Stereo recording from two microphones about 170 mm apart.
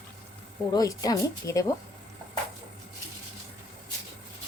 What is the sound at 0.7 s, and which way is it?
Speech, 20° left (ahead or behind).